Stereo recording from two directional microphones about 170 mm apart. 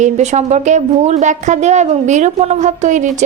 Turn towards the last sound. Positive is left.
turn(degrees=-45)  # may be behind; listen again after turning